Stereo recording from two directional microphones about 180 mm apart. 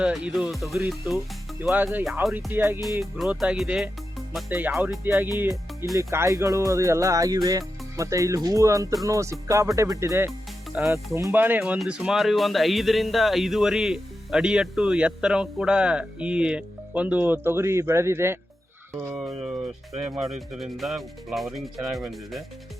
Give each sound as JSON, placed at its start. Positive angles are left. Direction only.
{"t": 0.0, "sound": "speech", "side_deg": 0}
{"t": 2.2, "sound": "speech", "side_deg": 0}
{"t": 2.5, "sound": "speech", "side_deg": -10}
{"t": 3.0, "sound": "speech", "side_deg": 0}
{"t": 20.6, "sound": "speech", "side_deg": 0}